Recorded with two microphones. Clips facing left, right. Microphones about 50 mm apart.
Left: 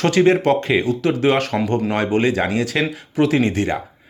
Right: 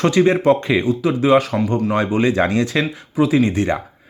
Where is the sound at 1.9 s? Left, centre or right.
Left.